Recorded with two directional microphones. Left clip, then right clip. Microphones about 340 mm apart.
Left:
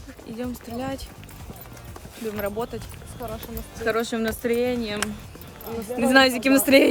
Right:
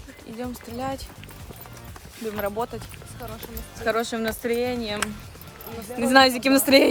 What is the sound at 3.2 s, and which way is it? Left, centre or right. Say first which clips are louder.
Speech: left 4 dB; left.